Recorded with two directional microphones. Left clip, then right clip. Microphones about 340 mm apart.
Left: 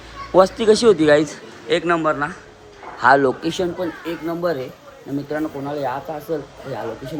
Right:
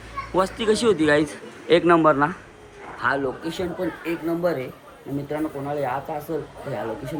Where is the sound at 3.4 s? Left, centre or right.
Centre.